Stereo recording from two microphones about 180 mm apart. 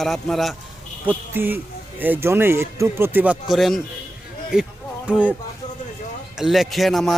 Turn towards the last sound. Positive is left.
turn(degrees=0)  # may be behind; listen again after turning